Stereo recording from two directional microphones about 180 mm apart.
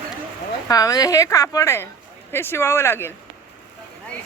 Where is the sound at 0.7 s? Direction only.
20° left (ahead or behind).